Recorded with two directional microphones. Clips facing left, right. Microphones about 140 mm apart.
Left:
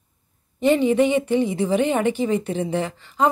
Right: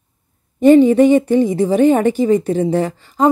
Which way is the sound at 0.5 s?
45° right (ahead or behind).